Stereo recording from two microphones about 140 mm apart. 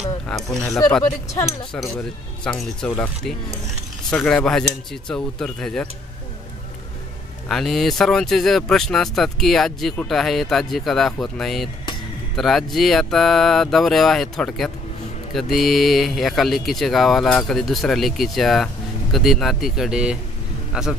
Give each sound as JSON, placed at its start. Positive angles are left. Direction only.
{"t": 0.3, "sound": "speech", "side_deg": 5}
{"t": 0.7, "sound": "speech", "side_deg": 20}
{"t": 2.4, "sound": "speech", "side_deg": 5}
{"t": 7.4, "sound": "speech", "side_deg": 0}